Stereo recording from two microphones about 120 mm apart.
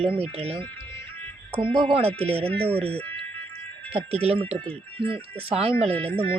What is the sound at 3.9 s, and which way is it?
Speech, 55° right (ahead or behind).